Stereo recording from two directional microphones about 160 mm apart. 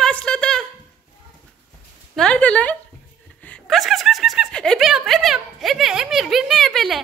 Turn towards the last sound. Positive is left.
turn(degrees=0)  # may be behind; listen again after turning